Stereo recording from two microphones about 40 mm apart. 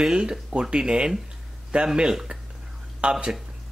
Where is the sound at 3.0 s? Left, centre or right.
Right.